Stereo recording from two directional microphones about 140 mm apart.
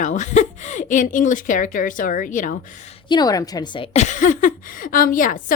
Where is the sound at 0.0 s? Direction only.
60° left (ahead or behind).